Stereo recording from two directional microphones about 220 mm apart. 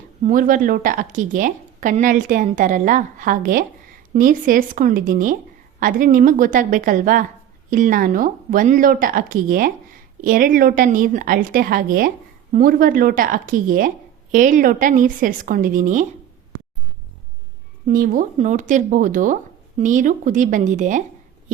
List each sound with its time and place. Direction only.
0.2 s speech: 35° right (ahead or behind)
17.8 s speech: 40° right (ahead or behind)